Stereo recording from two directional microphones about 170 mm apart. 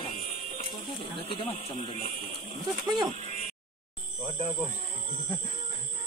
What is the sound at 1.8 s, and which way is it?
Speech, 40° left (ahead or behind).